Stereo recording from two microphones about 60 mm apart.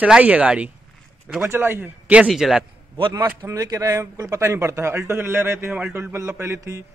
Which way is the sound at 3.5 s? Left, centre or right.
Right.